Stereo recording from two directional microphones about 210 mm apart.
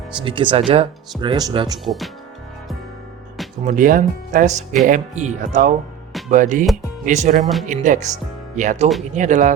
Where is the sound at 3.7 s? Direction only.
40° right (ahead or behind).